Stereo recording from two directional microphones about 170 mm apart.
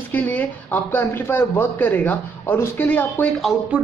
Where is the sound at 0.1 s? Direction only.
10° left (ahead or behind).